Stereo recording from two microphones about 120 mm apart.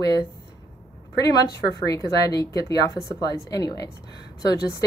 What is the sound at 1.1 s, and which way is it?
A woman's voice, 35° left (ahead or behind).